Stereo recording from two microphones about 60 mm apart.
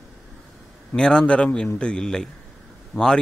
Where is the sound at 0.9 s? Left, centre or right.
Centre.